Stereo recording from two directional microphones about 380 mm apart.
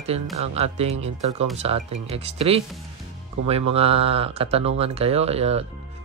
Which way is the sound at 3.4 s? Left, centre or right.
Right.